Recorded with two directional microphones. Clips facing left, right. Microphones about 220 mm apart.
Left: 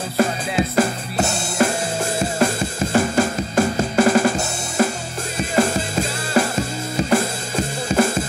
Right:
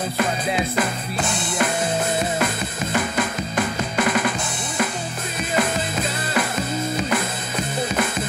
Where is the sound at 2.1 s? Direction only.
30° left (ahead or behind).